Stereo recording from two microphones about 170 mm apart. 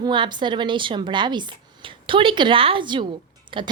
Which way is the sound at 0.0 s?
25° right (ahead or behind).